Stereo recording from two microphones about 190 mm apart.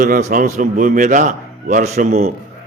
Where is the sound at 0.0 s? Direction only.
40° right (ahead or behind).